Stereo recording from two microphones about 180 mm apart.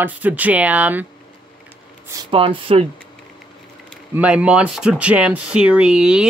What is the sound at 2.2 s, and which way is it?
Speech, 30° right (ahead or behind).